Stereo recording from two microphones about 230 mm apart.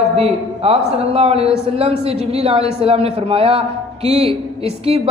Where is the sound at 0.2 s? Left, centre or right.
Right.